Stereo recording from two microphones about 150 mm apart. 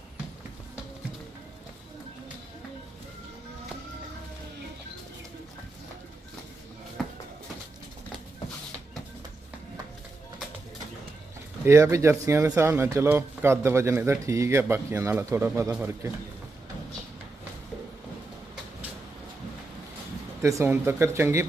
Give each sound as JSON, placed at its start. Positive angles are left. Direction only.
{"t": 11.6, "sound": "speech", "side_deg": -20}
{"t": 20.4, "sound": "speech", "side_deg": -20}